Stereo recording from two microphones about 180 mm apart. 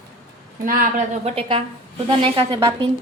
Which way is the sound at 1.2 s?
30° right (ahead or behind).